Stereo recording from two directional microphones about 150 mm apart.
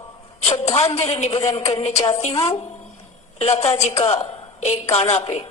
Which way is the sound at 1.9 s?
20° left (ahead or behind).